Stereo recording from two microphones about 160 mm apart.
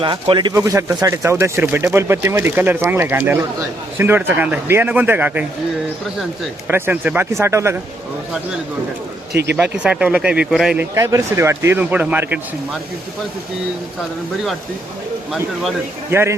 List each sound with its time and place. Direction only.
0.0 s speech: 30° right (ahead or behind)
0.5 s speech: 20° right (ahead or behind)
6.7 s speech: 15° right (ahead or behind)
9.3 s speech: 90° right
9.7 s speech: 5° right (ahead or behind)
10.9 s speech: 20° right (ahead or behind)
16.1 s speech: 15° right (ahead or behind)